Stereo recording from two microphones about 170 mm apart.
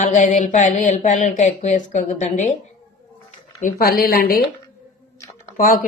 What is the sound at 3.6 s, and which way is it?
Speech, 60° left (ahead or behind).